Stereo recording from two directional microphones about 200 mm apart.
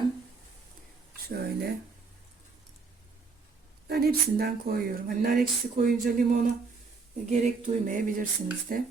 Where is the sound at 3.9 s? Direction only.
50° right (ahead or behind).